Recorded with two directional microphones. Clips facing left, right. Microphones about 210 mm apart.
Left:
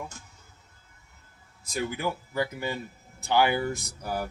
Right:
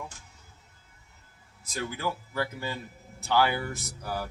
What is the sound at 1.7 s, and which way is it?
Speech, 15° left (ahead or behind).